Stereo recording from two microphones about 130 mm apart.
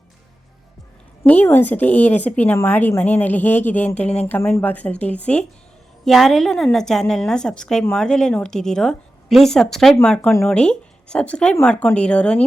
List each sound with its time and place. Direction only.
1.2 s a woman's voice: 15° left (ahead or behind)